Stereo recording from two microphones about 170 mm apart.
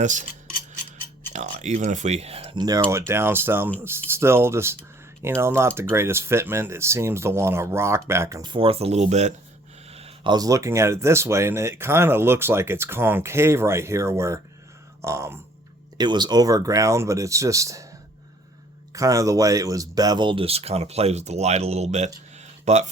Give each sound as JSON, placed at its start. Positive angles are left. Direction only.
{"t": 0.0, "sound": "speech", "side_deg": -45}
{"t": 1.3, "sound": "speech", "side_deg": -45}
{"t": 9.9, "sound": "a sound", "side_deg": -35}
{"t": 10.3, "sound": "speech", "side_deg": -20}
{"t": 18.9, "sound": "speech", "side_deg": -20}
{"t": 22.4, "sound": "a sound", "side_deg": -40}